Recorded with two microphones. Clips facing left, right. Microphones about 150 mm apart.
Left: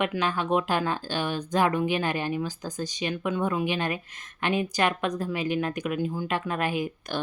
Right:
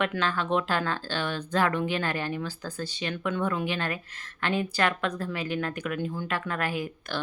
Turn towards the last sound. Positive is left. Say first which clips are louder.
# left 3 dB
turn(degrees=15)  # may be behind; listen again after turning